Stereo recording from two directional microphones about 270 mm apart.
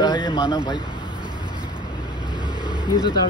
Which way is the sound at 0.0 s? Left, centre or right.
Centre.